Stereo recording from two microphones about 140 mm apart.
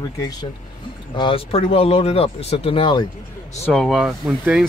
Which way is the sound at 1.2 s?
40° left (ahead or behind).